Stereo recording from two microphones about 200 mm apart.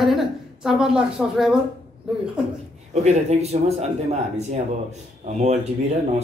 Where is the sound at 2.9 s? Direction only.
35° right (ahead or behind).